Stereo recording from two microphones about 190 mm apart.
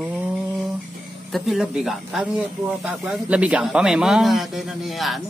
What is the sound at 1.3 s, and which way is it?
Speech, centre (ahead or behind).